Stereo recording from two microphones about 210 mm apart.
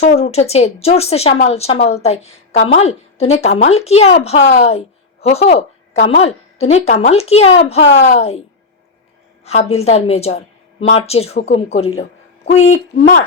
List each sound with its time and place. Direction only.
0.0 s a woman's voice: 30° left (ahead or behind)
9.4 s speech: 30° left (ahead or behind)